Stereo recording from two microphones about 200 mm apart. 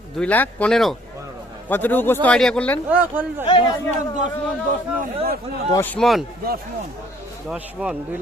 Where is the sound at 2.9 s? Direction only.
10° right (ahead or behind).